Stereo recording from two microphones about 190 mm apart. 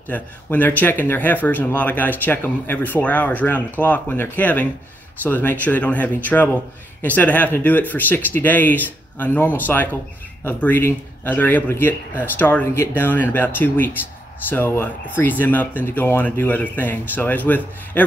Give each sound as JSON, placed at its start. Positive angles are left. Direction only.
{"t": 0.1, "sound": "speech", "side_deg": 10}